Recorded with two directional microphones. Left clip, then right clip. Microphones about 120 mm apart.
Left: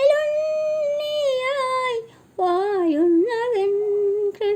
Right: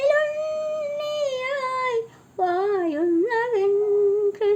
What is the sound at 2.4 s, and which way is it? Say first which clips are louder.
Female singing: left 2 dB; 40° left (ahead or behind).